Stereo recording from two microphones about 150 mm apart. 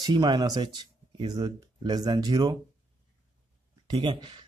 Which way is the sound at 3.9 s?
30° right (ahead or behind).